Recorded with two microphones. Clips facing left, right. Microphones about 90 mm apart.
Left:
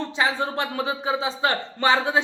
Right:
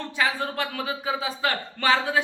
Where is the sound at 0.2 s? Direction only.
25° left (ahead or behind).